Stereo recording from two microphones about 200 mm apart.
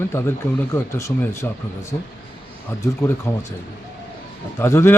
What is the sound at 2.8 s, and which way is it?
Speech, 15° left (ahead or behind).